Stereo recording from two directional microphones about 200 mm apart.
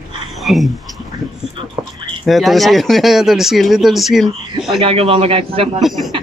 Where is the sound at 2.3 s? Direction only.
Centre (ahead or behind).